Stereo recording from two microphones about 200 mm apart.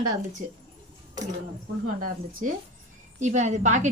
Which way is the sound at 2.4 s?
40° right (ahead or behind).